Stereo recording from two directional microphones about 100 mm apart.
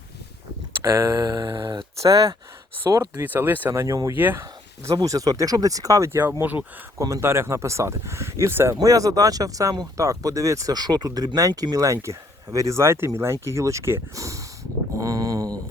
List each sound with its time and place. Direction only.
0.7 s a sound: 25° right (ahead or behind); by 1.8 s 45° right (ahead or behind)
2.0 s speech: 35° right (ahead or behind)
3.2 s speech: 20° right (ahead or behind)
3.7 s speech: 30° right (ahead or behind)
4.1 s speech: 20° right (ahead or behind)
4.9 s speech: 35° right (ahead or behind); by 6.7 s 15° right (ahead or behind)
7.0 s speech: 30° right (ahead or behind)
8.7 s speech: 35° right (ahead or behind)
15.0 s a sound: 40° right (ahead or behind)